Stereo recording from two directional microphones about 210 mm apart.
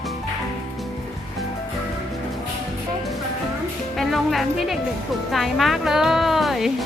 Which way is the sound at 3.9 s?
Centre (ahead or behind).